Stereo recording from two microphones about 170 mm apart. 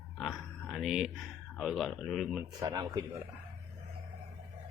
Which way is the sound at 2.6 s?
20° right (ahead or behind).